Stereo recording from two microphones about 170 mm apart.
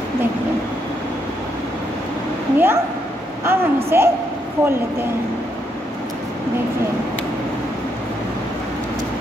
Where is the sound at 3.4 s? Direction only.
15° right (ahead or behind).